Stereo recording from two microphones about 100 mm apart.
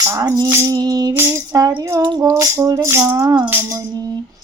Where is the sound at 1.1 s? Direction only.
20° right (ahead or behind).